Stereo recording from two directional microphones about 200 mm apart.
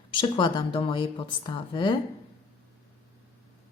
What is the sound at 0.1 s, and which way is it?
Speech, 25° left (ahead or behind).